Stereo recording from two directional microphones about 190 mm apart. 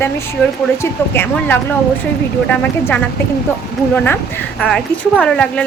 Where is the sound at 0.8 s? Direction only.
10° left (ahead or behind).